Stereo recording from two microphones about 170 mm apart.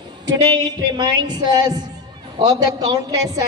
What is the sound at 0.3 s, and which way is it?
Speech, 25° right (ahead or behind).